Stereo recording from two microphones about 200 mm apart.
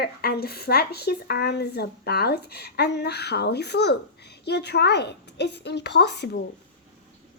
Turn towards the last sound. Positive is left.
turn(degrees=55)  # may be behind; listen again after turning